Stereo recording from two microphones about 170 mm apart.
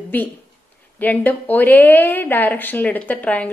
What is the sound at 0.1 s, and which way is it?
A woman's voice, 10° left (ahead or behind).